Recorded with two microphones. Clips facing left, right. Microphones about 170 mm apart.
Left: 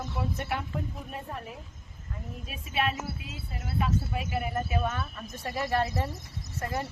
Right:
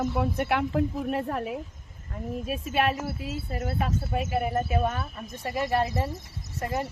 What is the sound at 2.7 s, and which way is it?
Speech, 45° right (ahead or behind).